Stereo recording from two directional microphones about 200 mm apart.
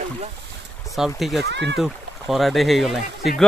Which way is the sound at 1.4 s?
60° right (ahead or behind).